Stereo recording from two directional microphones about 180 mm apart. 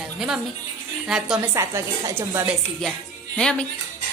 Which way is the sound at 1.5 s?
15° right (ahead or behind).